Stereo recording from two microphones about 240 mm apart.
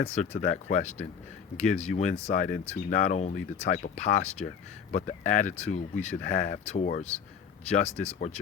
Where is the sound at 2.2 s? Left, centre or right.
Left.